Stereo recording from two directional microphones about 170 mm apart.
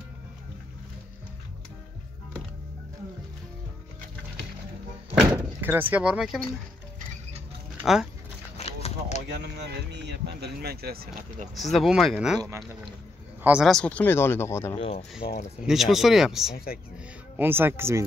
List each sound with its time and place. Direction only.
5.2 s speech: 10° right (ahead or behind)
7.8 s speech: centre (ahead or behind)
8.5 s a sound: 40° left (ahead or behind)
9.3 s speech: 85° right; by 11.4 s 65° right (ahead or behind)
11.5 s speech: centre (ahead or behind)
12.4 s speech: 15° right (ahead or behind)
13.4 s speech: 5° right (ahead or behind); by 14.8 s 15° left (ahead or behind)
14.8 s speech: 35° left (ahead or behind)
15.6 s speech: centre (ahead or behind)
16.5 s speech: 60° left (ahead or behind)
17.4 s speech: 10° right (ahead or behind)